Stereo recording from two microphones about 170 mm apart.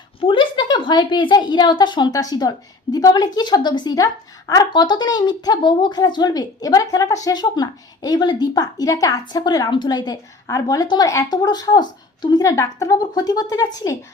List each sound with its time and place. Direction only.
0.2 s a woman's voice: 30° left (ahead or behind)